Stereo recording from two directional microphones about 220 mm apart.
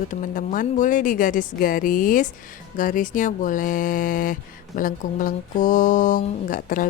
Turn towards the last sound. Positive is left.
turn(degrees=40)  # may be behind; listen again after turning